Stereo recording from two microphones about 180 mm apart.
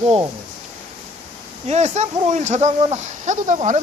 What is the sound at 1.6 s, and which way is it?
Speech, 40° right (ahead or behind).